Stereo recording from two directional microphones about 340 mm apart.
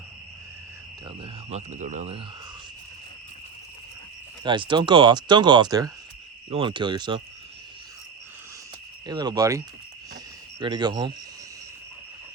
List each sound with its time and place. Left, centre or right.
1.0 s speech: centre
4.4 s speech: centre
9.0 s speech: centre